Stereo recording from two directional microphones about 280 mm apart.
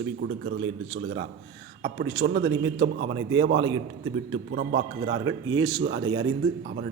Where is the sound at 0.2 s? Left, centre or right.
Right.